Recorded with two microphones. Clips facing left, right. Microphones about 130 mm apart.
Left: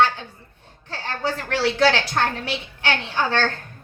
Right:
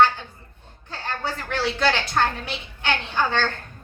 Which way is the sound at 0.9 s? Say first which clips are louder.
Left 3 dB; 75° left (ahead or behind).